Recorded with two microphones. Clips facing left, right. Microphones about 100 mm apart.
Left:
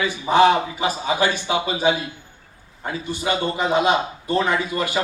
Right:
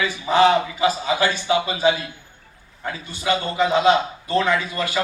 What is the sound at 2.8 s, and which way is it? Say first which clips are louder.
A man's voice: even; 20° left (ahead or behind).